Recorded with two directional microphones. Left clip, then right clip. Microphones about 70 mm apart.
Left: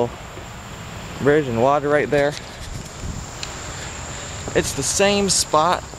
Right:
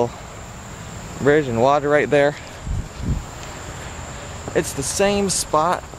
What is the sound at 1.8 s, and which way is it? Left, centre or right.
Speech, right.